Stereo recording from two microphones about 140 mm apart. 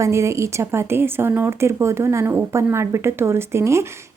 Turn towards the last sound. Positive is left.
turn(degrees=-20)  # may be behind; listen again after turning